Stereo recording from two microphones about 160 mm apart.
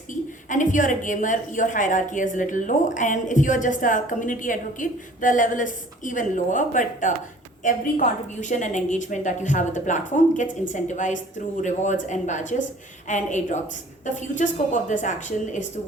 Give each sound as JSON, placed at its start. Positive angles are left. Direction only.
{"t": 0.1, "sound": "a woman's voice", "side_deg": 50}